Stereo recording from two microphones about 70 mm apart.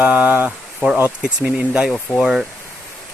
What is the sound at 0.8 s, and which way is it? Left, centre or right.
Speech, right.